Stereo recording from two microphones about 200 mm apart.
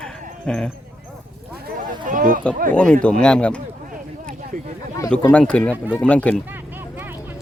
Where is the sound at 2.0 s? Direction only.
40° right (ahead or behind).